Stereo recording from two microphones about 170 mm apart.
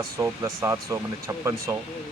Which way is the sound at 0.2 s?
15° right (ahead or behind).